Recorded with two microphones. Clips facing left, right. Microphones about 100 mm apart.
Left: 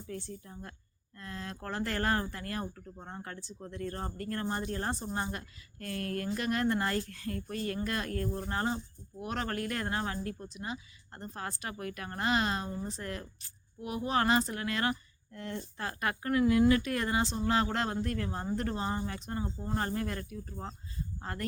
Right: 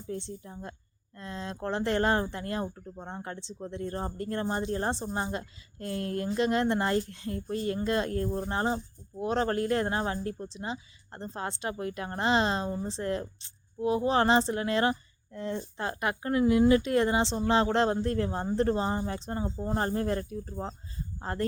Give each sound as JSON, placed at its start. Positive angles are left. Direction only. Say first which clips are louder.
{"t": 0.1, "sound": "speech", "louder": "right 5 dB", "side_deg": -25}